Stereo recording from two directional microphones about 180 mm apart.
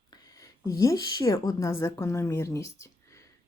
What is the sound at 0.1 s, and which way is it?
A woman's voice, 20° left (ahead or behind).